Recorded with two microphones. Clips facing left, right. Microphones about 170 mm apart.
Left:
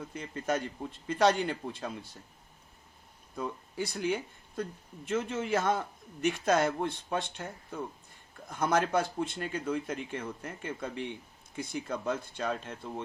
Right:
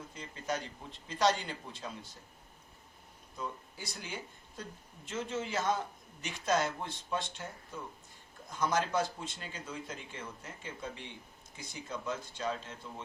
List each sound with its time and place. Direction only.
0.1 s speech: 55° left (ahead or behind)
3.3 s speech: 55° left (ahead or behind)